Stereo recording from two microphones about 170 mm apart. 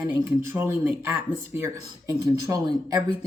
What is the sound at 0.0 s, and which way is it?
Speech, 15° right (ahead or behind).